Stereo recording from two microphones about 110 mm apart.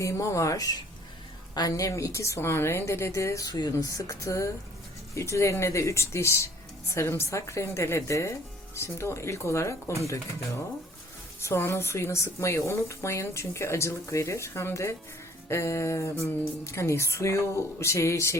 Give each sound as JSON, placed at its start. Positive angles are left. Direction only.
{"t": 0.0, "sound": "a woman's voice", "side_deg": 30}
{"t": 11.3, "sound": "a woman's voice", "side_deg": 25}